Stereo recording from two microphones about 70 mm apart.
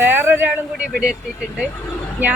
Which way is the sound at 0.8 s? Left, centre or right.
Centre.